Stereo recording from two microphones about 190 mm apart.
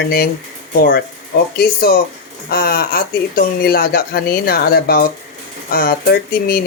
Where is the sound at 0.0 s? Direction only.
55° left (ahead or behind).